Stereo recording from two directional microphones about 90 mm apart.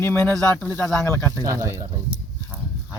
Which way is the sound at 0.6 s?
15° left (ahead or behind).